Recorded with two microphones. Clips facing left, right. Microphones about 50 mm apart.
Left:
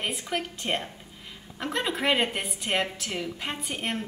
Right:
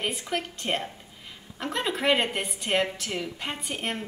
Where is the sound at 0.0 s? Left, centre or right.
Centre.